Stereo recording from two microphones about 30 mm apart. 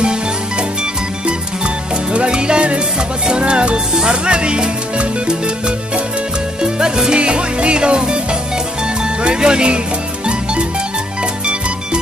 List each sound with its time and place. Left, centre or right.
2.1 s music: right
3.3 s speech: right
6.6 s salsa music: right
7.2 s speech: right
9.2 s speech: right